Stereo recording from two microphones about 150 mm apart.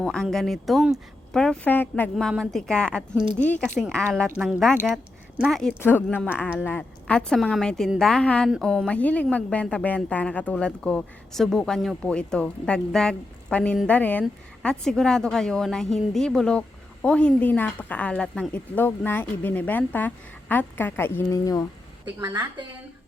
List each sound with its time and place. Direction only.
0.0 s speech: 5° left (ahead or behind)
2.1 s a woman's voice: centre (ahead or behind)
5.8 s a woman's voice: 15° left (ahead or behind)
22.2 s a woman's voice: 25° right (ahead or behind)